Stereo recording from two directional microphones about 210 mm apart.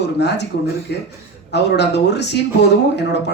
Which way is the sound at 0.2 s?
55° left (ahead or behind).